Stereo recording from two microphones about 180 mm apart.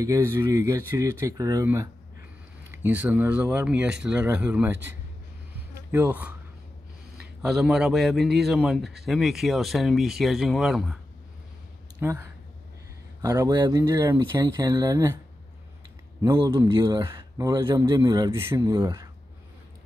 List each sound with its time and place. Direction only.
0.0 s a man's voice: 15° right (ahead or behind)
5.8 s a man's voice: 10° right (ahead or behind)
7.4 s speech: 5° right (ahead or behind)
12.0 s a man's voice: 10° right (ahead or behind)
16.2 s a man's voice: 15° right (ahead or behind)